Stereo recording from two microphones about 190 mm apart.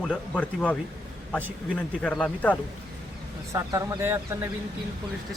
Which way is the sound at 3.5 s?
15° right (ahead or behind).